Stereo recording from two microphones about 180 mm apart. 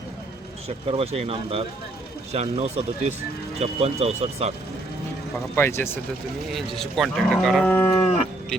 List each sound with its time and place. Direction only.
0.9 s speech: 35° right (ahead or behind)
5.5 s speech: 15° left (ahead or behind)
6.5 s speech: centre (ahead or behind)